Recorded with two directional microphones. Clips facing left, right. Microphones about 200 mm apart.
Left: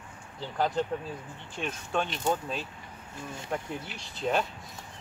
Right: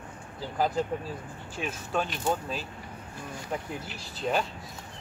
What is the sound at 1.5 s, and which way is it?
Speech, 5° right (ahead or behind).